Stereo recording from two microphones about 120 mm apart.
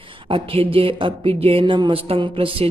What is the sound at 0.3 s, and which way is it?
Speech, 50° right (ahead or behind).